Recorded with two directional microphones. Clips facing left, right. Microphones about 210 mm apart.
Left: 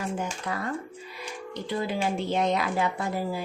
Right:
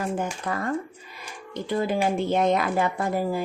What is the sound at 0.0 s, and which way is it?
Speech, 50° right (ahead or behind).